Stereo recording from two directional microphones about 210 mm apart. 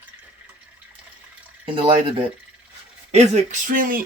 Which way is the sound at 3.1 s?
35° right (ahead or behind).